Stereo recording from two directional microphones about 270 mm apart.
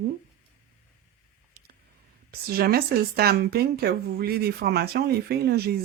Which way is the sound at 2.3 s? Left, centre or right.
Right.